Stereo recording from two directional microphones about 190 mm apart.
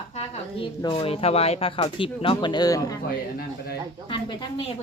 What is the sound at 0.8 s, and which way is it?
Speech, 30° left (ahead or behind).